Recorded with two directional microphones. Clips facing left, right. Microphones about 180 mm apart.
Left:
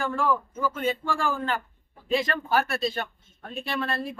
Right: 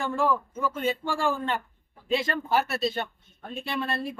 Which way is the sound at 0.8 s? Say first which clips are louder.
Right 1 dB; 25° right (ahead or behind).